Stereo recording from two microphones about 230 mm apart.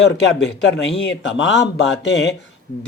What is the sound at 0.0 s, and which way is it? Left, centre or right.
A man's voice, left.